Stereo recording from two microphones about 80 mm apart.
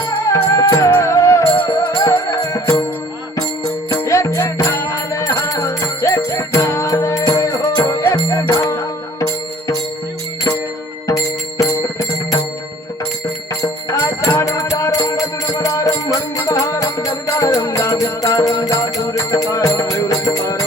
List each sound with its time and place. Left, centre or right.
0.3 s music: left
4.0 s music: left
11.1 s music: left
13.6 s music: left